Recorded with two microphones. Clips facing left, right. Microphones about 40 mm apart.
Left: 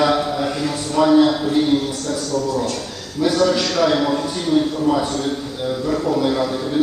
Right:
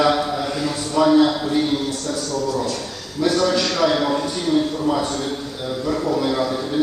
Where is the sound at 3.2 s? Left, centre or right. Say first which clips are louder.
Left 2 dB; centre.